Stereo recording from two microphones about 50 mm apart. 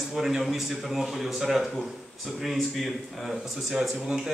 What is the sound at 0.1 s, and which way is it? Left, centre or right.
A man's voice, centre.